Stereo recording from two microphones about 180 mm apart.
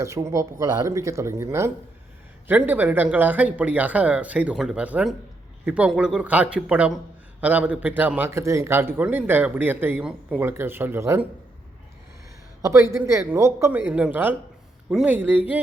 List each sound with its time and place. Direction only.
0.0 s speech: 15° right (ahead or behind)
12.6 s speech: 15° right (ahead or behind)